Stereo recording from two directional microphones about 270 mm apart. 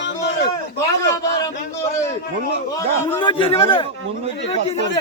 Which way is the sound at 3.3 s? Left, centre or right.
Centre.